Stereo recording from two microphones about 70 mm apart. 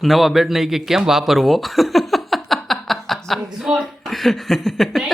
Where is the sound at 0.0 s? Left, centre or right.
Centre.